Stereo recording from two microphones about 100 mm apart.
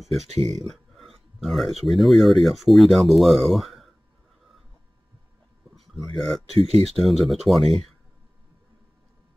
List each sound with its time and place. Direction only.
0.2 s speech: 90° right
0.6 s speech: centre (ahead or behind)
5.8 s speech: centre (ahead or behind)
6.5 s speech: 90° right
7.0 s speech: centre (ahead or behind)